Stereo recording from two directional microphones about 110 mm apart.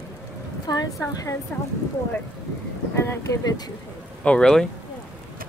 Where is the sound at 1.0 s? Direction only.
30° left (ahead or behind).